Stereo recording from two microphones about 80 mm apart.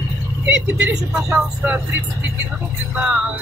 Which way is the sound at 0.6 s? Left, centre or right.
Centre.